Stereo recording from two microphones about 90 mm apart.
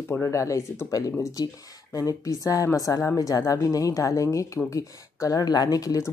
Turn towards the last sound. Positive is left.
turn(degrees=45)  # may be behind; listen again after turning